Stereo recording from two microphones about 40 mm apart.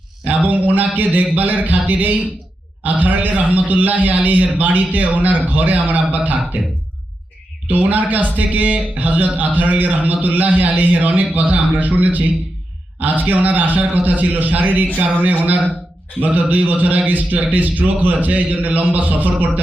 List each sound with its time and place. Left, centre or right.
0.3 s a man's voice: right
7.7 s a man's voice: right